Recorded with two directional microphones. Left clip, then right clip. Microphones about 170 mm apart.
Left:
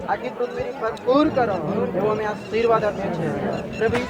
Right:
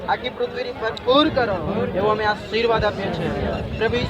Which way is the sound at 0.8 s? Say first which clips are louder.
Right 2 dB; 20° left (ahead or behind).